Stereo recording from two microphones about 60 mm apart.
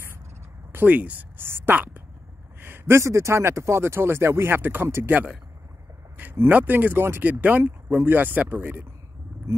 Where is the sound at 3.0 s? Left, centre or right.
Right.